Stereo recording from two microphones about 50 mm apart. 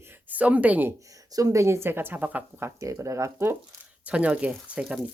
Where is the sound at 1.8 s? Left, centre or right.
Right.